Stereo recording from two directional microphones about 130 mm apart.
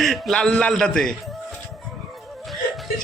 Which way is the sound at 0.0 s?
Centre (ahead or behind).